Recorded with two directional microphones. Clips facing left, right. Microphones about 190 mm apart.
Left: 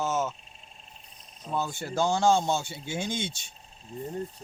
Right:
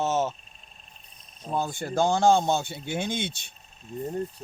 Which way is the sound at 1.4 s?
50° right (ahead or behind).